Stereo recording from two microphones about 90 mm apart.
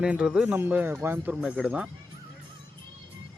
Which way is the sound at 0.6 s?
20° right (ahead or behind).